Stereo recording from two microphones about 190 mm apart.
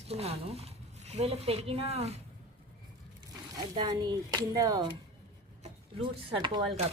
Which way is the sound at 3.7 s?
20° right (ahead or behind).